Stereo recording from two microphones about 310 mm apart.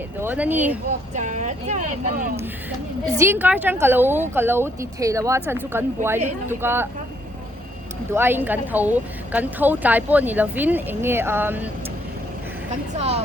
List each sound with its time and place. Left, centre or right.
0.2 s speech: centre
1.1 s speech: right
3.2 s speech: centre
8.1 s speech: centre
13.0 s speech: centre